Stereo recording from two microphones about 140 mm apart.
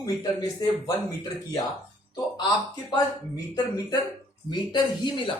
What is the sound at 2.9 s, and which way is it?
Speech, 30° left (ahead or behind).